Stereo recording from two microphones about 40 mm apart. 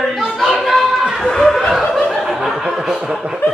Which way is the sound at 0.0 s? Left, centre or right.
Centre.